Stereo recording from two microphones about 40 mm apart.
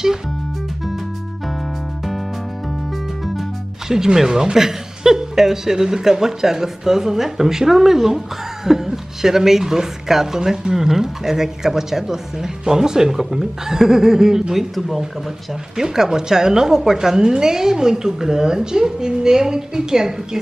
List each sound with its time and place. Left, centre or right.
3.9 s a woman's voice: centre